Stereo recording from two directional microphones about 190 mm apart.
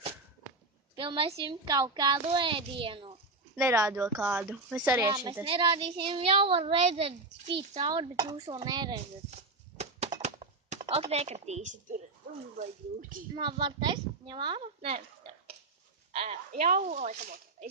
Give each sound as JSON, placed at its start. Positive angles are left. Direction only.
{"t": 0.9, "sound": "a child's voice", "side_deg": -25}
{"t": 3.5, "sound": "speech", "side_deg": -15}
{"t": 5.4, "sound": "a child's voice", "side_deg": -25}
{"t": 9.3, "sound": "a sound", "side_deg": -35}
{"t": 12.5, "sound": "speech", "side_deg": -40}
{"t": 13.3, "sound": "a child's voice", "side_deg": -25}
{"t": 16.1, "sound": "speech", "side_deg": -35}